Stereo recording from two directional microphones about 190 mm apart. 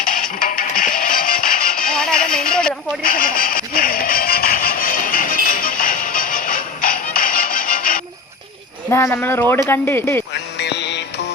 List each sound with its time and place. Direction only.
0.0 s music: 45° left (ahead or behind)
8.9 s speech: 15° left (ahead or behind)
10.6 s music: 65° left (ahead or behind)